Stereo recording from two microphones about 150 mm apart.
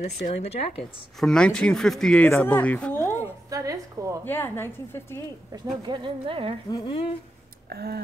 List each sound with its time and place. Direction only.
0.0 s speech: 45° left (ahead or behind)
1.2 s speech: 5° left (ahead or behind)
3.4 s a woman's voice: 20° right (ahead or behind)
4.2 s speech: 15° left (ahead or behind)
5.8 s speech: 30° right (ahead or behind)
6.7 s speech: 35° left (ahead or behind)
7.7 s a sound: 90° right